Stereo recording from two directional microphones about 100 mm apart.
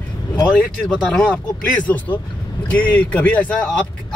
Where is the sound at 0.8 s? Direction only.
10° left (ahead or behind).